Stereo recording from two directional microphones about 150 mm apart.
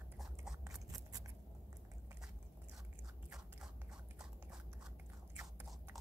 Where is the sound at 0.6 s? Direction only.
20° right (ahead or behind).